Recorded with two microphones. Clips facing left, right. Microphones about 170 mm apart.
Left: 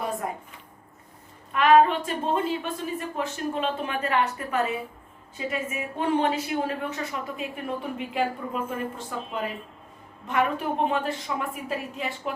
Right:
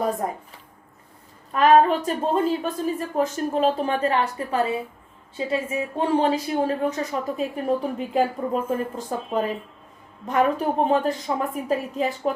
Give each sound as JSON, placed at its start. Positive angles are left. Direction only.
{"t": 0.2, "sound": "a woman's voice", "side_deg": -35}
{"t": 1.5, "sound": "a woman's voice", "side_deg": -40}